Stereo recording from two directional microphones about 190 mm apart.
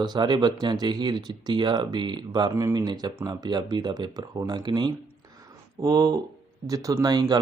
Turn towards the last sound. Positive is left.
turn(degrees=-20)  # may be behind; listen again after turning